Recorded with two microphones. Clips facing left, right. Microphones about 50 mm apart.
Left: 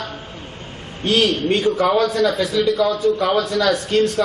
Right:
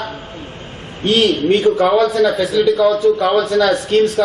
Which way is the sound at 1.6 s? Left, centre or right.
Right.